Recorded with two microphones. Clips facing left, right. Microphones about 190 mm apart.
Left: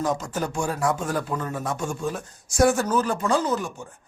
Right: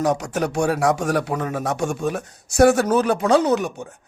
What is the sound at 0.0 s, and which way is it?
Speech, 70° right (ahead or behind).